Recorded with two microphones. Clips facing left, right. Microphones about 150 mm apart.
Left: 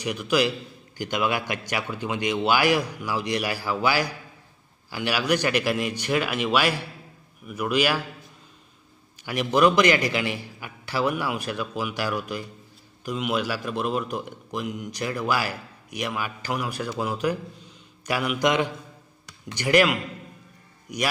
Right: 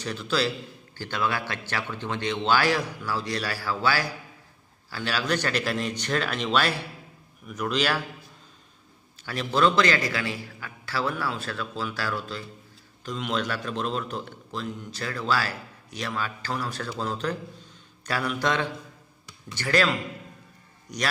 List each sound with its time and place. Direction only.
0.0 s a man's voice: 15° left (ahead or behind)
9.2 s a man's voice: 15° left (ahead or behind)